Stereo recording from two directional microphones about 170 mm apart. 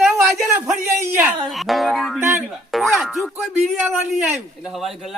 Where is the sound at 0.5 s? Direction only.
15° right (ahead or behind).